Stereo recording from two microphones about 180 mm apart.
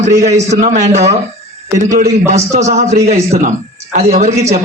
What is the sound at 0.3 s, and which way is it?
Speech, 40° right (ahead or behind).